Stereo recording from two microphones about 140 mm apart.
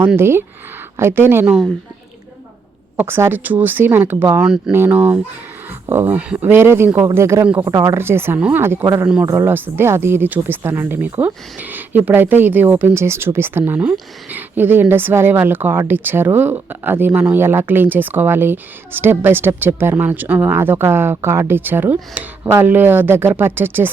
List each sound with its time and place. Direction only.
0.2 s a woman's voice: 15° right (ahead or behind)
1.5 s speech: 5° right (ahead or behind)
3.0 s a woman's voice: 15° right (ahead or behind)